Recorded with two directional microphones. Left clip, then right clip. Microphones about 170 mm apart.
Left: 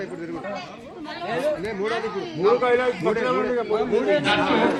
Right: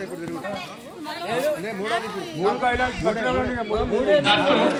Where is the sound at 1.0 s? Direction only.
10° right (ahead or behind).